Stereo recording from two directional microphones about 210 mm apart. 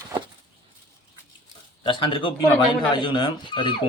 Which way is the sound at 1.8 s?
25° left (ahead or behind).